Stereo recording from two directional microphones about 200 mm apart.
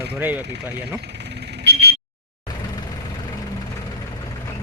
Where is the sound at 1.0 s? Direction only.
55° right (ahead or behind).